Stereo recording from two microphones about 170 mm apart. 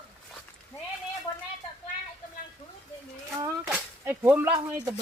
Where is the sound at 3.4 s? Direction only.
15° right (ahead or behind).